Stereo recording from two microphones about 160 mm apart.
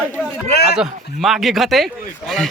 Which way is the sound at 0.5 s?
85° left.